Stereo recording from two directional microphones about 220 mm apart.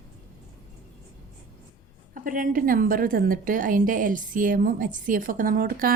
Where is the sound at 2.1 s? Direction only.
40° right (ahead or behind).